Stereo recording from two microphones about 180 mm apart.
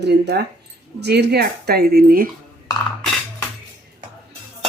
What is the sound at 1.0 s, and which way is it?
Speech, 65° right (ahead or behind).